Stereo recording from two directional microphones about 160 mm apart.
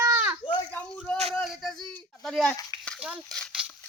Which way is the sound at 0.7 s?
10° left (ahead or behind).